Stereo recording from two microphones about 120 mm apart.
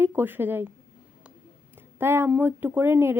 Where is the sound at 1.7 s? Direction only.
20° right (ahead or behind).